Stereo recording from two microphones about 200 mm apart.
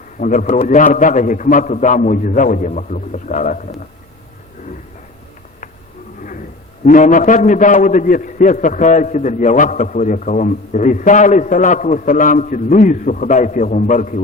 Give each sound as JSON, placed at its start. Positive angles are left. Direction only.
{"t": 0.2, "sound": "a man's voice", "side_deg": 40}
{"t": 6.8, "sound": "a man's voice", "side_deg": 40}